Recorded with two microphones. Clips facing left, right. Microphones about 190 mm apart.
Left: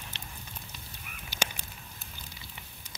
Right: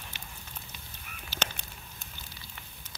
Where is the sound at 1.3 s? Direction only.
15° left (ahead or behind).